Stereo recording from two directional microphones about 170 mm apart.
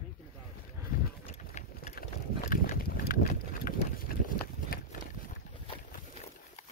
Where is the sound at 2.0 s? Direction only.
60° left (ahead or behind).